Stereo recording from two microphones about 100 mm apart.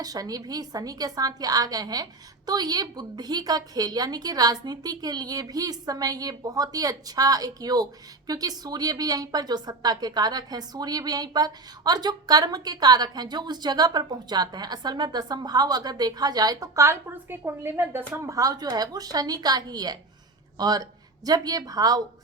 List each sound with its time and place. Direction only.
0.0 s a woman's voice: 40° right (ahead or behind)